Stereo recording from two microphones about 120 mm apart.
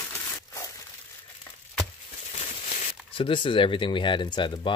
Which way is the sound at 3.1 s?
45° left (ahead or behind).